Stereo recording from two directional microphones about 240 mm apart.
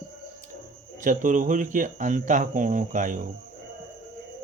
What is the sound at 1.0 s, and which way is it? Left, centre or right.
Speech, right.